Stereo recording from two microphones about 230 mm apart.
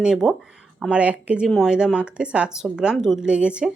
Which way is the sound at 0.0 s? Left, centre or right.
Centre.